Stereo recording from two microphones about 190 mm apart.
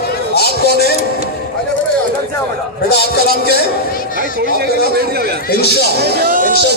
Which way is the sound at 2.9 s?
55° left (ahead or behind).